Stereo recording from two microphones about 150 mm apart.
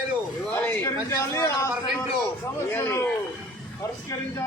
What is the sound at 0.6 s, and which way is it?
A man's voice, 20° left (ahead or behind).